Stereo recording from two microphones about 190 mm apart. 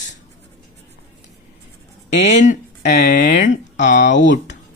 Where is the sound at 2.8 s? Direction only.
60° left (ahead or behind).